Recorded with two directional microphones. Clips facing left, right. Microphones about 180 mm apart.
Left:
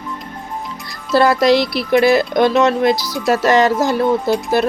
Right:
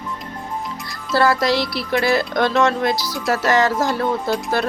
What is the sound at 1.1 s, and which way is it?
A woman's voice, 20° left (ahead or behind).